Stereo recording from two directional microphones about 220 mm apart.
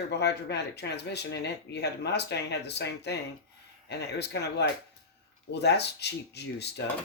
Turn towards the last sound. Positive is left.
turn(degrees=50)  # may be behind; listen again after turning